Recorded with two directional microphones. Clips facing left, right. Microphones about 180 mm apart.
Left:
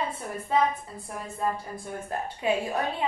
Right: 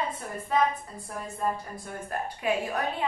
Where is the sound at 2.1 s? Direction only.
25° left (ahead or behind).